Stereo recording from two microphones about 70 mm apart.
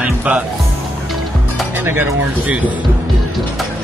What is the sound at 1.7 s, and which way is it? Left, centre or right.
Music, right.